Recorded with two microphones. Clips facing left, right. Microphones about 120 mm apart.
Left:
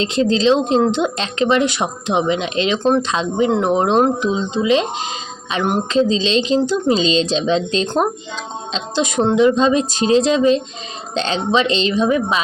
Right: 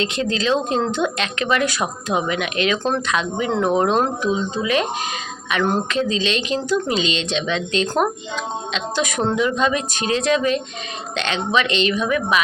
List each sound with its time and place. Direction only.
0.0 s speech: 30° left (ahead or behind)